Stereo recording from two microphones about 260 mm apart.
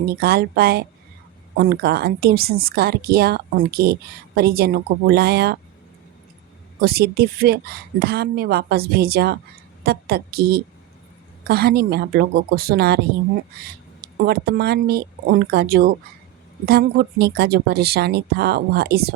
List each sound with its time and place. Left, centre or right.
0.0 s a woman's voice: right
6.7 s a woman's voice: right
14.0 s a woman's voice: right